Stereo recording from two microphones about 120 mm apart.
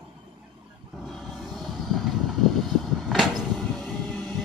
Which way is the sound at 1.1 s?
Centre (ahead or behind).